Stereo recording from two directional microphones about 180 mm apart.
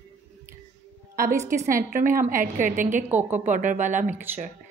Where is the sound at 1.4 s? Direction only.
45° right (ahead or behind).